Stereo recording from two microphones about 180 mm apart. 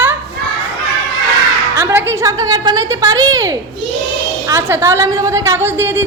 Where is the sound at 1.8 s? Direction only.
15° right (ahead or behind).